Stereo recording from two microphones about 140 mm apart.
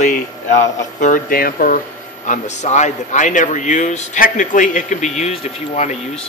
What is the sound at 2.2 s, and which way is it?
A man's voice, 60° left (ahead or behind).